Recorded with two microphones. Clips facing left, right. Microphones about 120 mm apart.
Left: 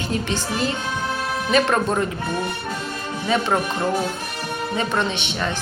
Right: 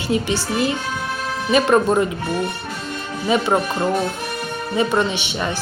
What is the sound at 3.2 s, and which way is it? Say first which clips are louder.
Speech: right 3 dB; 10° right (ahead or behind).